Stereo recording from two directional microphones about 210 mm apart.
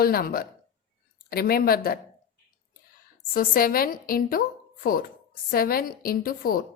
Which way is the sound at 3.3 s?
45° left (ahead or behind).